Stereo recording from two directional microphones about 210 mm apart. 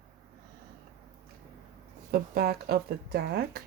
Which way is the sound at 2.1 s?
45° right (ahead or behind).